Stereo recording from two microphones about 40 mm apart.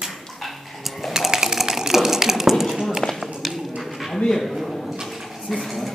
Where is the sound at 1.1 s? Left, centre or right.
Centre.